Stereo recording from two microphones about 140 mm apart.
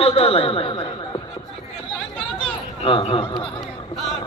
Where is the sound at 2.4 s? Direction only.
40° left (ahead or behind).